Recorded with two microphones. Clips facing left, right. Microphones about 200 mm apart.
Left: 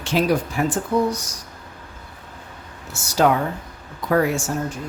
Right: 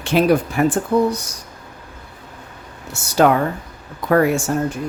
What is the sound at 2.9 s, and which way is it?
Speech, 60° right (ahead or behind).